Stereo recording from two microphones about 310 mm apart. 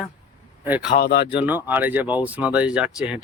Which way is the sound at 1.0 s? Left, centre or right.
Left.